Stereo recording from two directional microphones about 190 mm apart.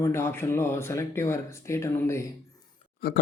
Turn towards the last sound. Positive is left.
turn(degrees=55)  # may be behind; listen again after turning